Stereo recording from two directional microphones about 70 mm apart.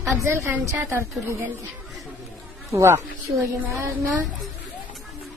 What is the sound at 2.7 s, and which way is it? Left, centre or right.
Speech, right.